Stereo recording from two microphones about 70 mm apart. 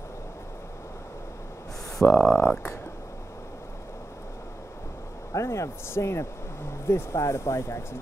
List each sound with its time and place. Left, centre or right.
2.0 s speech: left
2.3 s speech: left
5.3 s speech: left